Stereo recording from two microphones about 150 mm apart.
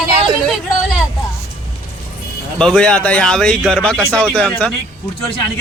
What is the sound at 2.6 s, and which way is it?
Speech, 5° left (ahead or behind).